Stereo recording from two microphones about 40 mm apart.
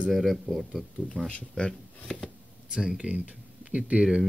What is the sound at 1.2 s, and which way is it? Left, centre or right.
Speech, left.